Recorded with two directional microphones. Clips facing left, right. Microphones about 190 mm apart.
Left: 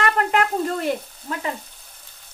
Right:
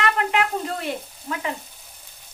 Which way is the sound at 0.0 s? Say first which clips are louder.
Left 2 dB; 45° left (ahead or behind).